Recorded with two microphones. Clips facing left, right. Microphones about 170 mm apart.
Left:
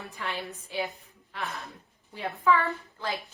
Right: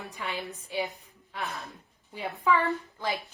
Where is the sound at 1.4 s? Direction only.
Centre (ahead or behind).